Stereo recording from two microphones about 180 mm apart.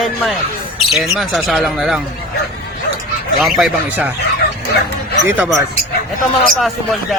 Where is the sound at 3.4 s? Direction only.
Centre (ahead or behind).